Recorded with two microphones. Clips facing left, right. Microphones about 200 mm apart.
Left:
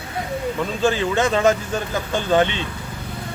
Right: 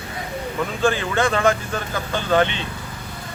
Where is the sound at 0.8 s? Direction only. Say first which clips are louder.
Left 1 dB; 20° left (ahead or behind).